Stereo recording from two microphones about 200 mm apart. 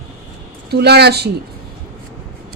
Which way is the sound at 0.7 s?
55° right (ahead or behind).